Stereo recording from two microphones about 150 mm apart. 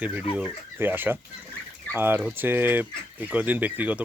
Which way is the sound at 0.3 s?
10° right (ahead or behind).